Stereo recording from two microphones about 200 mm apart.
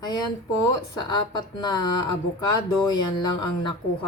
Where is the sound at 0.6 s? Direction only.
20° left (ahead or behind).